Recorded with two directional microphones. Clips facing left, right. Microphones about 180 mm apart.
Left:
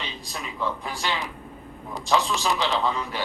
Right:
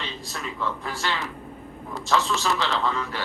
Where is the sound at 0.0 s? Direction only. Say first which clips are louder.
Right 1 dB; 15° left (ahead or behind).